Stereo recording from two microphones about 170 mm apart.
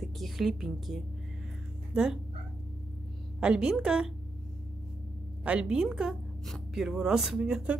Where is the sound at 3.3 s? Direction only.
5° right (ahead or behind).